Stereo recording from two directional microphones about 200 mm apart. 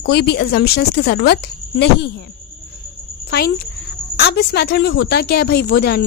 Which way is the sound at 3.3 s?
55° left (ahead or behind).